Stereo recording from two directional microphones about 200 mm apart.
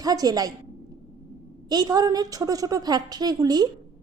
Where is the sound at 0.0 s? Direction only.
20° right (ahead or behind).